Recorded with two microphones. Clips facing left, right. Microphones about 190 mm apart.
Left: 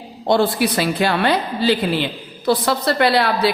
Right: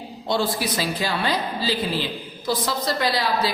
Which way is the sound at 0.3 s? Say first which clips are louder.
Left 7 dB; 60° left (ahead or behind).